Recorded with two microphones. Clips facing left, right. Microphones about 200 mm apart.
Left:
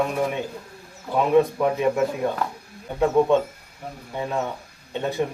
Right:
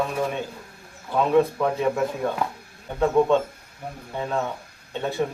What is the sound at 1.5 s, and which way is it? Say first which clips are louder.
Speech: left 2 dB; 15° left (ahead or behind).